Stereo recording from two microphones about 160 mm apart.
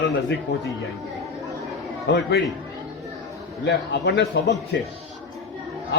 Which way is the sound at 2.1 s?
90° left.